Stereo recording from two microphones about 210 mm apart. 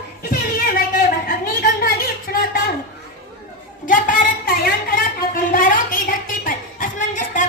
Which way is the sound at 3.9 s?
40° left (ahead or behind).